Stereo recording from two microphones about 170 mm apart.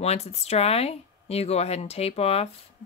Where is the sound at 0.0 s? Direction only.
40° left (ahead or behind).